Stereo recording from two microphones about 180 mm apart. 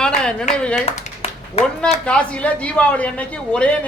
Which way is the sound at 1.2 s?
35° left (ahead or behind).